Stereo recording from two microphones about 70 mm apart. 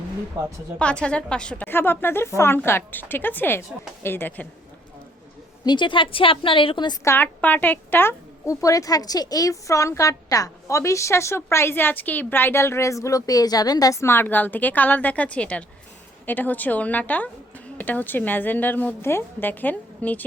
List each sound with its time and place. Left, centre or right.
0.4 s speech: right
0.8 s a woman's voice: centre
1.6 s a woman's voice: left
5.6 s a woman's voice: left
7.2 s a woman's voice: left
8.4 s a woman's voice: left
14.0 s a woman's voice: left